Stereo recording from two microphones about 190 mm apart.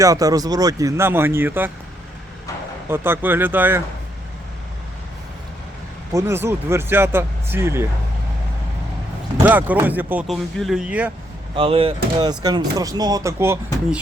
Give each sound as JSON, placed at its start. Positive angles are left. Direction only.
{"t": 0.0, "sound": "speech", "side_deg": -20}
{"t": 2.9, "sound": "speech", "side_deg": -10}
{"t": 6.1, "sound": "speech", "side_deg": -15}
{"t": 9.4, "sound": "speech", "side_deg": -10}
{"t": 11.5, "sound": "speech", "side_deg": -30}